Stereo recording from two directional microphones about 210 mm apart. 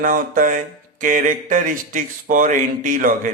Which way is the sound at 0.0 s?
40° right (ahead or behind).